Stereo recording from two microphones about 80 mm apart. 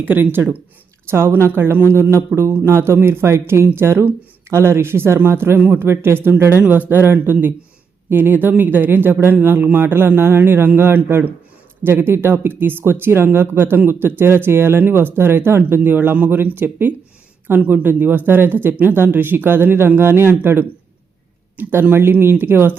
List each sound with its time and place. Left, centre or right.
0.0 s speech: right